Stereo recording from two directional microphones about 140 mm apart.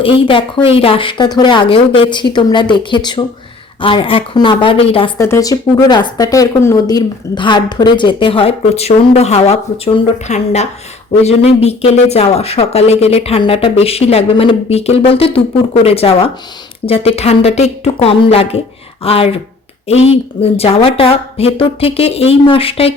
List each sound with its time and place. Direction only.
0.0 s speech: 40° left (ahead or behind)
5.1 s speech: 20° left (ahead or behind); by 22.9 s 40° left (ahead or behind)